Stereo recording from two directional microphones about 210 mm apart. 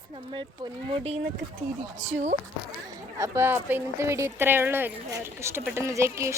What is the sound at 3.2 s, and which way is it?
Speech, 15° right (ahead or behind).